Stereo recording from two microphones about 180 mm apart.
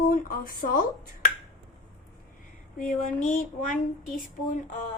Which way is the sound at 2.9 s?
45° left (ahead or behind).